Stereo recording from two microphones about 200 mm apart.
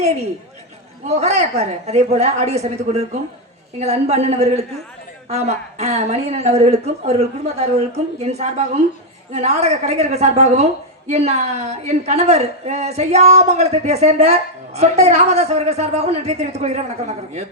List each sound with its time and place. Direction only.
1.0 s a woman's voice: 35° right (ahead or behind)